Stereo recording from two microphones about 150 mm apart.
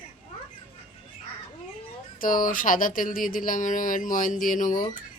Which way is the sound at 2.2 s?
65° left (ahead or behind).